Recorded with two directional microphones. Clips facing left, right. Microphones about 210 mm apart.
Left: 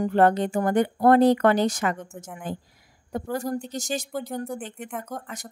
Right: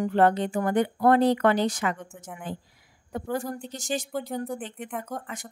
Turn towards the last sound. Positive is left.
turn(degrees=0)  # may be behind; listen again after turning